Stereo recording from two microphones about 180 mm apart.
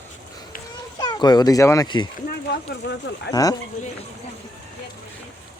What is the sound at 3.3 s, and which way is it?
Speech, 20° left (ahead or behind).